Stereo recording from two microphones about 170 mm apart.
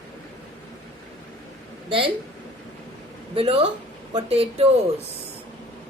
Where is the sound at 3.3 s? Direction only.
35° right (ahead or behind).